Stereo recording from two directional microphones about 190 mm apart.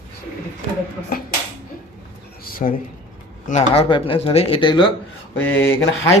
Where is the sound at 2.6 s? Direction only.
40° left (ahead or behind); by 4.9 s 25° left (ahead or behind).